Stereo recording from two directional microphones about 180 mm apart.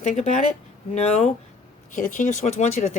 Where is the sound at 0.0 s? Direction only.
40° left (ahead or behind).